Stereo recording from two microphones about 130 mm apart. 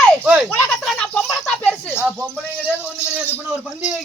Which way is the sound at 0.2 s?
10° right (ahead or behind).